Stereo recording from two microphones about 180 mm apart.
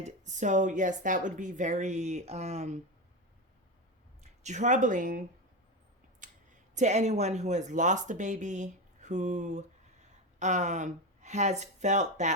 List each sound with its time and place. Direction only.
0.0 s speech: 45° right (ahead or behind)
4.2 s speech: 40° right (ahead or behind)
6.7 s speech: 40° right (ahead or behind)